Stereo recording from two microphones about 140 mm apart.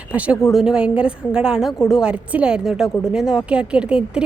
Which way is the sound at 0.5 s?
5° right (ahead or behind).